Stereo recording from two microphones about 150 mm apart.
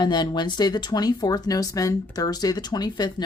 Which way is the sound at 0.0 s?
30° left (ahead or behind).